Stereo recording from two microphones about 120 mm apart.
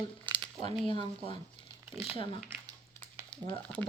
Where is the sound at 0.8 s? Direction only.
45° left (ahead or behind).